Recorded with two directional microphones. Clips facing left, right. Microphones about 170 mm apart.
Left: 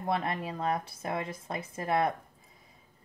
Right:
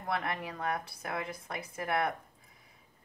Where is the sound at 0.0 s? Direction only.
25° left (ahead or behind).